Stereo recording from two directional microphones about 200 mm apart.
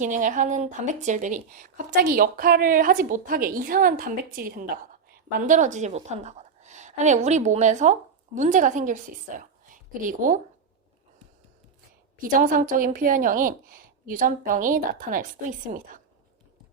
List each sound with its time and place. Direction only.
0.0 s a woman's voice: 40° right (ahead or behind)
1.9 s a woman's voice: 50° right (ahead or behind)
12.2 s a woman's voice: 40° right (ahead or behind)